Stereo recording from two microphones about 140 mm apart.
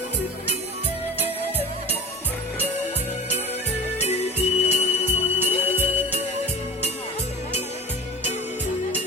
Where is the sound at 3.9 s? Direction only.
50° left (ahead or behind).